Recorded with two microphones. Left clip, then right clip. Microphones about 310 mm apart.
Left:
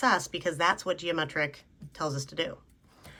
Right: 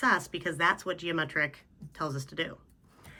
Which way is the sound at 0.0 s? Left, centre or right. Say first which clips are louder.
Left 1 dB; centre.